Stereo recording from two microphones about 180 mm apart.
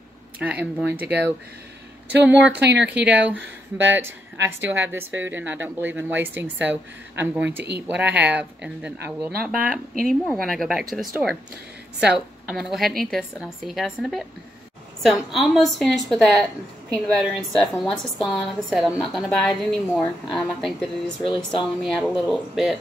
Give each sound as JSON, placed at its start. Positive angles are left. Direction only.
{"t": 0.4, "sound": "speech", "side_deg": -10}
{"t": 2.5, "sound": "speech", "side_deg": -70}
{"t": 2.8, "sound": "speech", "side_deg": -10}
{"t": 3.3, "sound": "speech", "side_deg": -90}
{"t": 4.6, "sound": "a woman's voice", "side_deg": -10}